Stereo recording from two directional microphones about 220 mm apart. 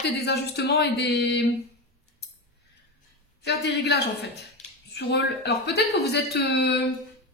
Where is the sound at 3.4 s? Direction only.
50° left (ahead or behind).